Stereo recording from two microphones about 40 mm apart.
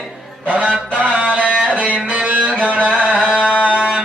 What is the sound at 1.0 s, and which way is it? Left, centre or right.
Music, right.